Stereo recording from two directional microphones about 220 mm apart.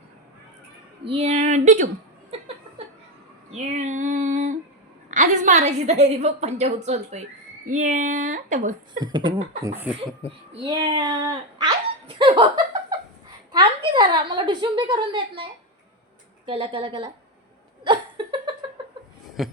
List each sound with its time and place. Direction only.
1.0 s a woman's voice: 30° right (ahead or behind)
3.6 s female singing: 30° right (ahead or behind)
5.1 s a woman's voice: 35° right (ahead or behind)
9.0 s cough: 20° right (ahead or behind)
10.2 s a child's voice: 20° right (ahead or behind)
13.5 s a woman's voice: 20° right (ahead or behind)
16.5 s a woman's voice: 25° right (ahead or behind)
17.8 s a sound: 20° right (ahead or behind)
19.4 s speech: centre (ahead or behind)